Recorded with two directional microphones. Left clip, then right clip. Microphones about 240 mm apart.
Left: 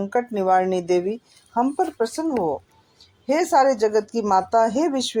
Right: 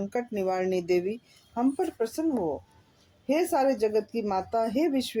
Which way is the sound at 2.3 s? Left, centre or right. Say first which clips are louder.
Left 6 dB; left.